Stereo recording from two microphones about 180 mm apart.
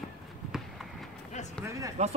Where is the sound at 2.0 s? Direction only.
40° right (ahead or behind).